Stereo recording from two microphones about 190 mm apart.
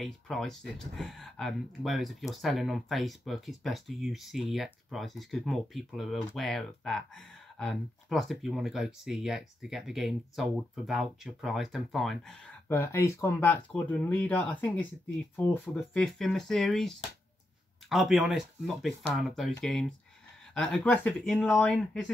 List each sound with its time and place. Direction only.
0.0 s speech: centre (ahead or behind)
12.6 s speech: 15° left (ahead or behind)